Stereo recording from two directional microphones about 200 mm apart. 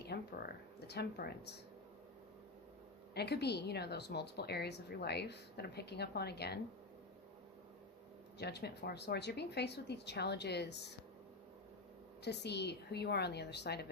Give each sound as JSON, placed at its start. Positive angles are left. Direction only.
{"t": 0.1, "sound": "a sound", "side_deg": 50}
{"t": 0.9, "sound": "a woman's voice", "side_deg": 55}
{"t": 3.2, "sound": "a woman's voice", "side_deg": 55}
{"t": 8.4, "sound": "a woman's voice", "side_deg": 55}
{"t": 12.2, "sound": "a woman's voice", "side_deg": 55}